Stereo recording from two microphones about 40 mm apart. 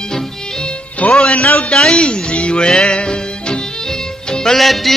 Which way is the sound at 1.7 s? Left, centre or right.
Centre.